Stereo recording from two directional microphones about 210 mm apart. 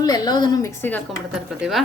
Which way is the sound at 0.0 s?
20° left (ahead or behind).